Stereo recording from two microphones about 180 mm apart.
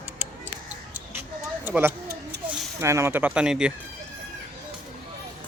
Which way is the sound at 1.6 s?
10° right (ahead or behind).